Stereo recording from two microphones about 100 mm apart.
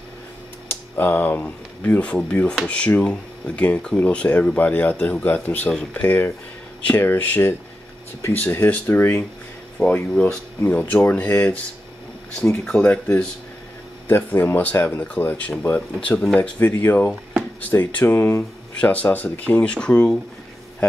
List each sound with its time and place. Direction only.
0.7 s speech: 20° left (ahead or behind)
12.7 s speech: 15° left (ahead or behind)
17.1 s drawer open or close: 5° right (ahead or behind)
17.6 s speech: 20° left (ahead or behind)